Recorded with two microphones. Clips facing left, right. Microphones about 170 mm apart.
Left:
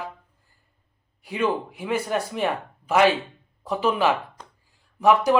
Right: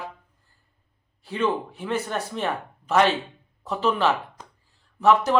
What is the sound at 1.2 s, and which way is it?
A man's voice, 10° left (ahead or behind).